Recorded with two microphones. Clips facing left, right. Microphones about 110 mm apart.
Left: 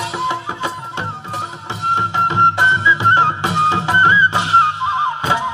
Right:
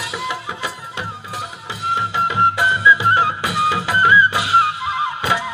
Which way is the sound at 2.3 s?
30° left (ahead or behind).